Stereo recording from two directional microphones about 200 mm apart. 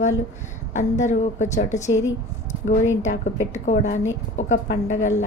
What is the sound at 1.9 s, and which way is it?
Speech, 75° left (ahead or behind).